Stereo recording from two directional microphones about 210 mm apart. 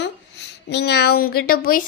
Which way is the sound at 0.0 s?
55° left (ahead or behind).